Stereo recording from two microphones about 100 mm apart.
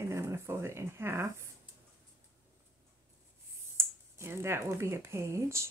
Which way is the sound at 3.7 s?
25° right (ahead or behind).